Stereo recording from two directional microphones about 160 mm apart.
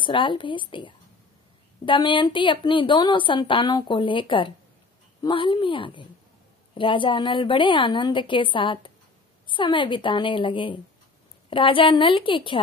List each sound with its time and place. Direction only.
0.0 s a woman's voice: 30° left (ahead or behind)